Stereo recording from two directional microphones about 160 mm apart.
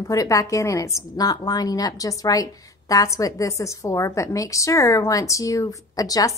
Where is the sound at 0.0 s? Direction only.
20° left (ahead or behind).